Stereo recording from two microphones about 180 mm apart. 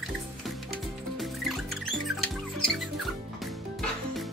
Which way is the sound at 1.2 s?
Centre (ahead or behind).